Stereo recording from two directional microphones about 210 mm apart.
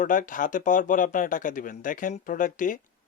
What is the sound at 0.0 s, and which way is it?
Speech, 40° left (ahead or behind).